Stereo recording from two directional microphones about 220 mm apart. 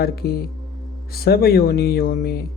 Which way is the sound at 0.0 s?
45° left (ahead or behind).